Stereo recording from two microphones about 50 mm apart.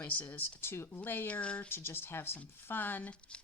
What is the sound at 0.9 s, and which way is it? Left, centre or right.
Speech, left.